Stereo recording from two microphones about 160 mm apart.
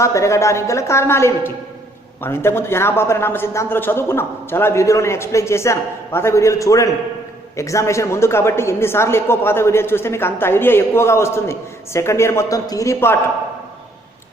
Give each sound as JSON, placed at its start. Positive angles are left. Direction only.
{"t": 0.0, "sound": "a man's voice", "side_deg": 20}